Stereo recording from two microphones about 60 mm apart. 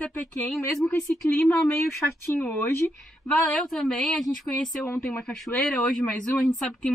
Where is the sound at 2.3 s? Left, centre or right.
Left.